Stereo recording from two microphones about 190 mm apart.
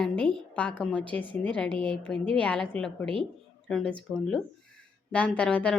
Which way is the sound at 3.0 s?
25° right (ahead or behind).